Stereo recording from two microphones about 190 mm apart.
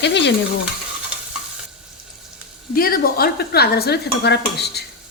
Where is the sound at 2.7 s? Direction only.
50° left (ahead or behind).